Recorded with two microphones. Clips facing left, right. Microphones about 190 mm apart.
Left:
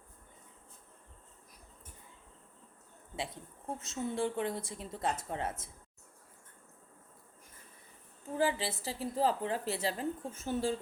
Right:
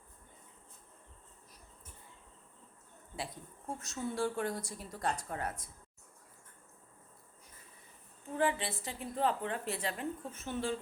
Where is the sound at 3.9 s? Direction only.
20° left (ahead or behind).